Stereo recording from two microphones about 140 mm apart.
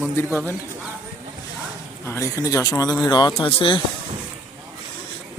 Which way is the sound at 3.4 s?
40° left (ahead or behind).